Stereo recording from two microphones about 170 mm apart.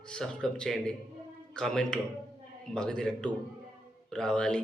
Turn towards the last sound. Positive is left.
turn(degrees=5)  # may be behind; listen again after turning